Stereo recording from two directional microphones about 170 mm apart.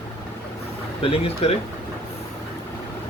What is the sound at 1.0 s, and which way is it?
Speech, 35° left (ahead or behind).